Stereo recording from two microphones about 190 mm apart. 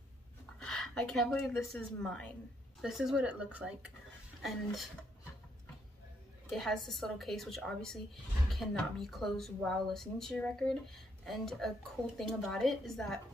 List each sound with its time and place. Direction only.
0.6 s a woman's voice: 5° left (ahead or behind)
6.5 s a woman's voice: centre (ahead or behind)